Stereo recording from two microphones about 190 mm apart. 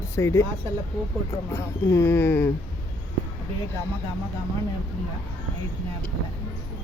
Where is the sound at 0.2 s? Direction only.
15° left (ahead or behind).